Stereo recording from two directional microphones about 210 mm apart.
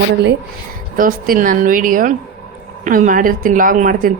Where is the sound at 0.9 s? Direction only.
40° right (ahead or behind).